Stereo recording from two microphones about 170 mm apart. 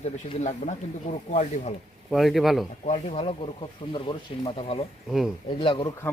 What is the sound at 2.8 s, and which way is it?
Speech, 40° left (ahead or behind).